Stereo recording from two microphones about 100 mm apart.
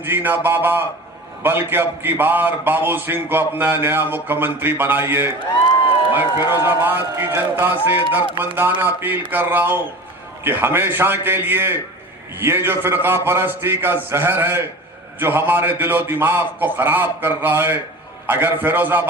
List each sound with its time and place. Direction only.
0.0 s a man's voice: 20° right (ahead or behind)